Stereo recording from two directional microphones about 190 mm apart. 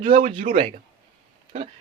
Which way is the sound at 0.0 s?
40° right (ahead or behind).